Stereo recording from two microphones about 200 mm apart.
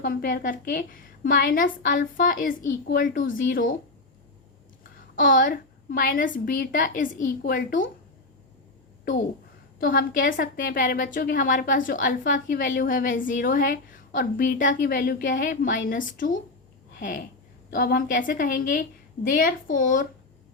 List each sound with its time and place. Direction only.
0.0 s a woman's voice: 45° left (ahead or behind)
5.1 s a woman's voice: 45° left (ahead or behind)
9.8 s a woman's voice: 45° left (ahead or behind)